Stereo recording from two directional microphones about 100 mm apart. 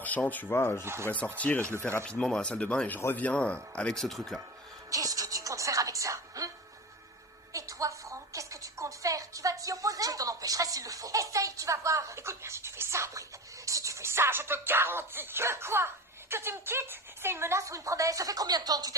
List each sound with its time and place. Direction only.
0.0 s speech: 15° left (ahead or behind)
4.9 s music: 35° right (ahead or behind)
7.5 s music: 30° right (ahead or behind)
16.3 s speech: 25° right (ahead or behind); by 18.9 s 40° right (ahead or behind)